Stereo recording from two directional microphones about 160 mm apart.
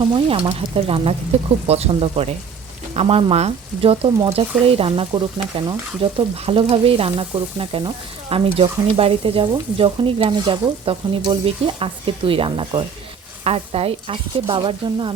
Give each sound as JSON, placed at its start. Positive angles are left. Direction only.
{"t": 0.0, "sound": "speech", "side_deg": -35}